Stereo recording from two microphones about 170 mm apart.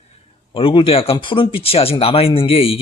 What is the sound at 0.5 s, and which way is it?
Speech, 30° left (ahead or behind).